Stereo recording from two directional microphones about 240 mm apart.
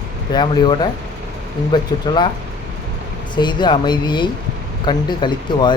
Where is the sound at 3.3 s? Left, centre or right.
Centre.